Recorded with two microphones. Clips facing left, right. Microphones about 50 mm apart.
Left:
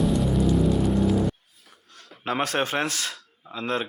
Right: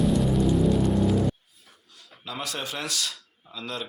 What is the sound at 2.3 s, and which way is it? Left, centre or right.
Speech, left.